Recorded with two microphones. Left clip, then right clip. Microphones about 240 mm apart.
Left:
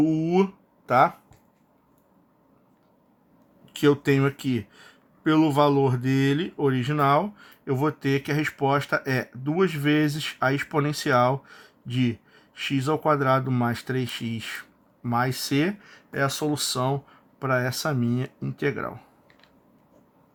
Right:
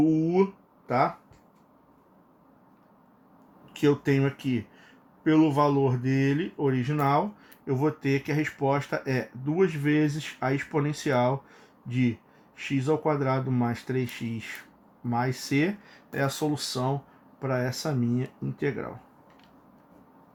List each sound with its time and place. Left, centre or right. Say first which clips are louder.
3.8 s speech: left 3 dB; left